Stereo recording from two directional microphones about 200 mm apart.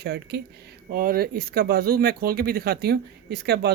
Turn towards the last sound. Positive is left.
turn(degrees=-55)  # may be behind; listen again after turning